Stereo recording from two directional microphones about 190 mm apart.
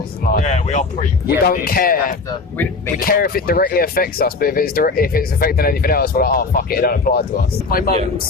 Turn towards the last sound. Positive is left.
turn(degrees=50)  # may be behind; listen again after turning